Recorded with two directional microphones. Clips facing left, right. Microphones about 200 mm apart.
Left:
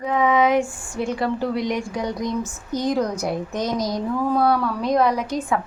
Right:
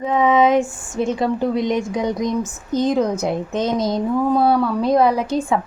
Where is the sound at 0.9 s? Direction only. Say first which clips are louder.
Right 4 dB; 25° right (ahead or behind).